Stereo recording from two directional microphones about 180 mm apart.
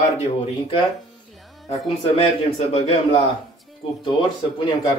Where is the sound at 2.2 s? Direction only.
35° left (ahead or behind).